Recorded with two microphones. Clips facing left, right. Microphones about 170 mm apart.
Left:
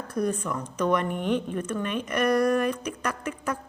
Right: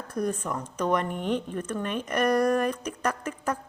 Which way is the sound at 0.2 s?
40° right (ahead or behind).